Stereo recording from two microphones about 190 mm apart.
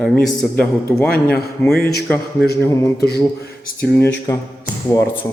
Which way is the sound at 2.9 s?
55° left (ahead or behind).